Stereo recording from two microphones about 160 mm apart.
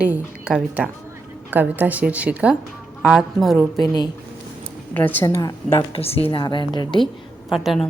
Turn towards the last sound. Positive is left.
turn(degrees=0)  # may be behind; listen again after turning